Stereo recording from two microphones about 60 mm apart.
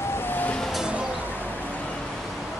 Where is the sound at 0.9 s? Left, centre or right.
Centre.